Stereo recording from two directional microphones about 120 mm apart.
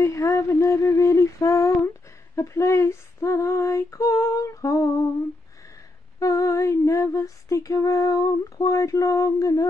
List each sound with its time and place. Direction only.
0.0 s a sound: 25° left (ahead or behind)
2.3 s female singing: 25° left (ahead or behind)
6.1 s female singing: 25° left (ahead or behind)